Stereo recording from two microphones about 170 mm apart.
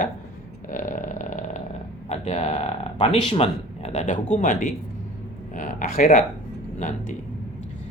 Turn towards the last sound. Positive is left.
turn(degrees=45)  # may be behind; listen again after turning